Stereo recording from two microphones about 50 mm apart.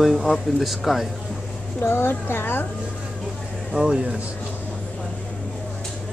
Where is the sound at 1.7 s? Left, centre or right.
Left.